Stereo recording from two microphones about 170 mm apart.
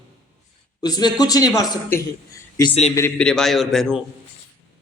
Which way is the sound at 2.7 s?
40° left (ahead or behind).